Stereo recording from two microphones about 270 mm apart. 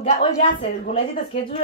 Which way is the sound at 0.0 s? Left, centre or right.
Left.